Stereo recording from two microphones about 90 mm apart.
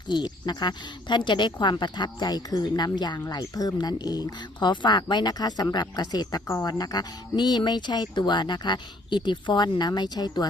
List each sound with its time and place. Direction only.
0.1 s speech: 55° left (ahead or behind)